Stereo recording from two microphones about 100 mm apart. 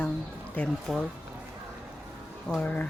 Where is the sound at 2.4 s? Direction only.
5° left (ahead or behind).